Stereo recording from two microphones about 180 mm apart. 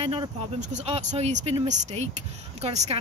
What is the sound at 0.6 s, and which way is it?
A woman's voice, 40° right (ahead or behind).